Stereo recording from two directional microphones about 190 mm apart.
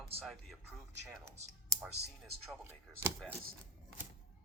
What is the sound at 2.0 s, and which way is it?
Speech, 60° right (ahead or behind).